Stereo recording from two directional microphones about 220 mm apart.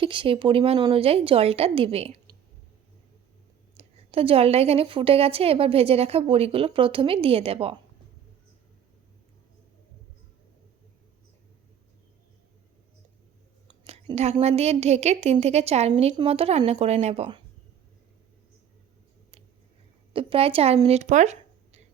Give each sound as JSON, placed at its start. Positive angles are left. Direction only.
{"t": 0.0, "sound": "a woman's voice", "side_deg": -25}
{"t": 3.8, "sound": "a woman's voice", "side_deg": -25}
{"t": 13.8, "sound": "a woman's voice", "side_deg": -30}
{"t": 20.1, "sound": "speech", "side_deg": -25}